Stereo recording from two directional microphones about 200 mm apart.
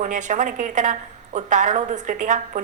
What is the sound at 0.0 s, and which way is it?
A woman's voice, 40° right (ahead or behind).